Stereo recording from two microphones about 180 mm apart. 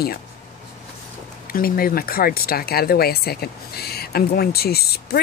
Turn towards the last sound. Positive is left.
turn(degrees=60)  # may be behind; listen again after turning